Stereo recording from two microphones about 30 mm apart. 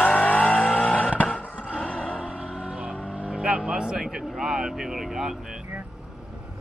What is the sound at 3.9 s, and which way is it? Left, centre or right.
Vehicle, centre.